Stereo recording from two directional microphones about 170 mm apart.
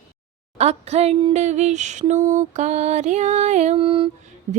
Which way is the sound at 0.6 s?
40° right (ahead or behind).